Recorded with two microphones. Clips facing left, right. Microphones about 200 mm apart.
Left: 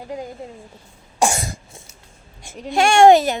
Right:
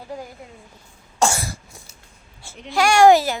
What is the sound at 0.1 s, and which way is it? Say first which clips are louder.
Speech: left 4 dB; 20° left (ahead or behind).